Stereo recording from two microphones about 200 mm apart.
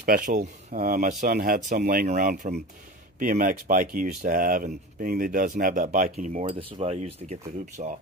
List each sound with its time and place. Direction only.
0.0 s speech: 45° right (ahead or behind)
6.4 s speech: 30° right (ahead or behind)